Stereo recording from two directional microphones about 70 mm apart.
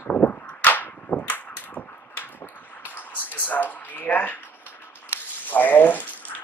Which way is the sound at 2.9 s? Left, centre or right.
Left.